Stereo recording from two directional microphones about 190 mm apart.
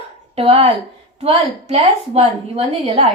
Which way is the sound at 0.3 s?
30° right (ahead or behind).